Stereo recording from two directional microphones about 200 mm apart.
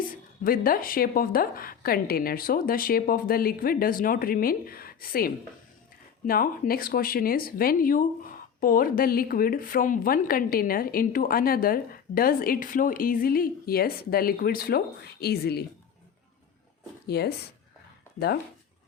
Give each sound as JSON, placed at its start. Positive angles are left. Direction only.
{"t": 0.1, "sound": "a woman's voice", "side_deg": 45}
{"t": 17.1, "sound": "a woman's voice", "side_deg": 55}